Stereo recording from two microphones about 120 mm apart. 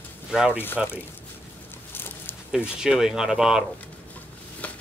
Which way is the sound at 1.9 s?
20° left (ahead or behind).